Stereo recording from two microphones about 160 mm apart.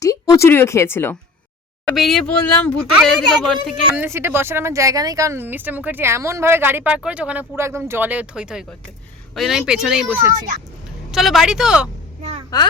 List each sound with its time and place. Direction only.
0.0 s speech: 20° left (ahead or behind)
1.9 s speech: centre (ahead or behind)
4.0 s speech: 15° right (ahead or behind)
12.5 s a woman's voice: 25° left (ahead or behind)